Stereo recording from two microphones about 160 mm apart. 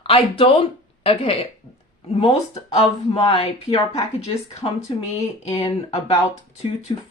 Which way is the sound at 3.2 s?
30° left (ahead or behind).